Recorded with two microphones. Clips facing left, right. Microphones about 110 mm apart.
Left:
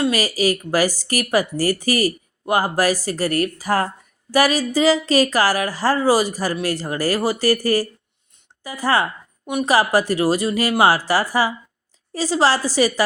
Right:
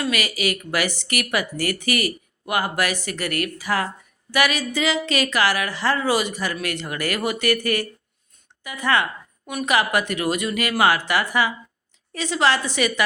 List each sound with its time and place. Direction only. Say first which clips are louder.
0.0 s a woman's voice: left 5 dB; 35° left (ahead or behind)